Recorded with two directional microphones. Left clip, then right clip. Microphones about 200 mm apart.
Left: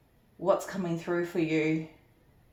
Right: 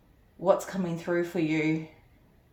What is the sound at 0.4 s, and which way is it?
Speech, 40° right (ahead or behind).